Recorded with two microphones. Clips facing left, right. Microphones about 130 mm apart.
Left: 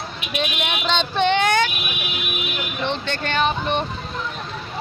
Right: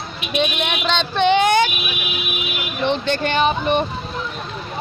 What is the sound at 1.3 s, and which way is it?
Speech, 15° right (ahead or behind).